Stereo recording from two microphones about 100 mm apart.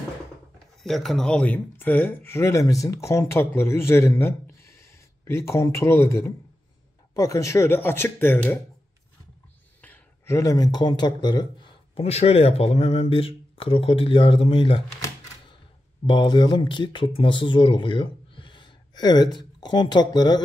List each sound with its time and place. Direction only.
0.8 s speech: 5° left (ahead or behind); by 8.5 s 20° left (ahead or behind)
9.8 s a sound: 15° left (ahead or behind)
10.2 s speech: 35° left (ahead or behind)
11.9 s speech: 90° left; by 14.8 s 60° left (ahead or behind)
16.1 s speech: 50° left (ahead or behind)